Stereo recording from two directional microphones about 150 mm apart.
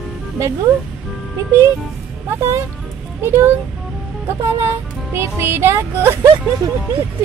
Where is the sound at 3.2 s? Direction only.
15° right (ahead or behind).